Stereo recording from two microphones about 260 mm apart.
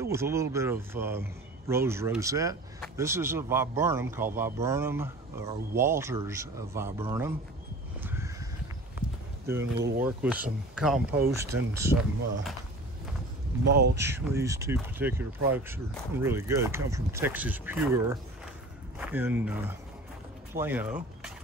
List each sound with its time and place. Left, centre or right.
0.0 s a man's voice: centre
8.0 s crow: centre
10.0 s a man's voice: centre
13.7 s speech: right
13.9 s a man's voice: centre